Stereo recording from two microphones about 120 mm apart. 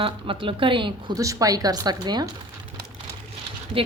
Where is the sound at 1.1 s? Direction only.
30° right (ahead or behind).